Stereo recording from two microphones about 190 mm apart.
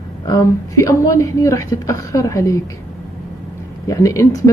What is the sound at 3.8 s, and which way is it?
Speech, 15° left (ahead or behind).